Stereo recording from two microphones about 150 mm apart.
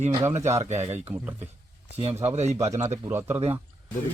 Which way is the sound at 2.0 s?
45° right (ahead or behind).